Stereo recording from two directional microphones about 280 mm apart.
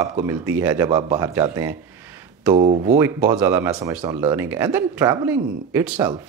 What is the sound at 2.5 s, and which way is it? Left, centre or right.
Speech, right.